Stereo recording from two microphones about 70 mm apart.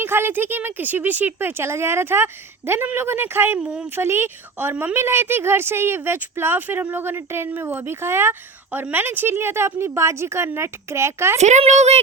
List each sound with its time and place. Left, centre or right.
0.0 s speech: right
3.6 s speech: centre
3.8 s speech: right